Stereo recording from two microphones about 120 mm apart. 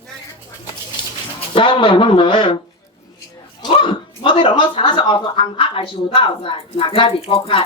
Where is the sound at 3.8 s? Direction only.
45° left (ahead or behind).